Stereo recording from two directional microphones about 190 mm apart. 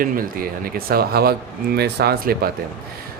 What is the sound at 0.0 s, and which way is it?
Speech, 50° right (ahead or behind).